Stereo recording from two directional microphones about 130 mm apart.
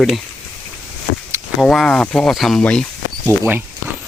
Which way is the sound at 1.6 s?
5° left (ahead or behind).